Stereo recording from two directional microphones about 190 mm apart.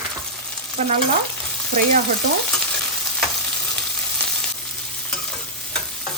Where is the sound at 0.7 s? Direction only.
35° right (ahead or behind).